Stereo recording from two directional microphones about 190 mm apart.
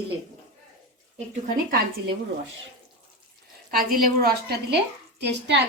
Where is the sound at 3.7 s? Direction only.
50° right (ahead or behind).